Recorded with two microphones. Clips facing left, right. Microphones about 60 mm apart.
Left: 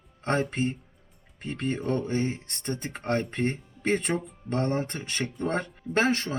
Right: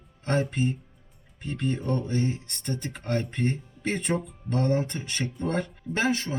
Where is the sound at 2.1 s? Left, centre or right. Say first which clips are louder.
Even; left.